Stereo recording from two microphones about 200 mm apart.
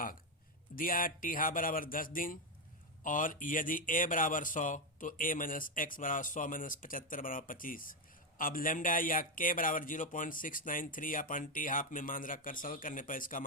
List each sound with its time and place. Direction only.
0.8 s speech: 45° left (ahead or behind)